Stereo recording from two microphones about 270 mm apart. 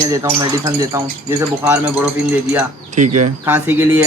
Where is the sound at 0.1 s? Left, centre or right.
Centre.